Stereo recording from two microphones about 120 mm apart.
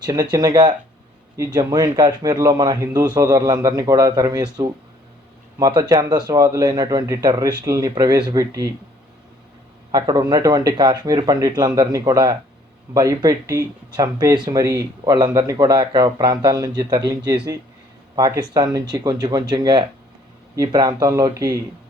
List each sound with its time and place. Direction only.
0.0 s speech: 35° right (ahead or behind)
9.9 s speech: 35° right (ahead or behind)